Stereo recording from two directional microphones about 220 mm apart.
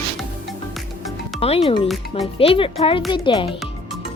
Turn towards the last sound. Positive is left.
turn(degrees=25)  # may be behind; listen again after turning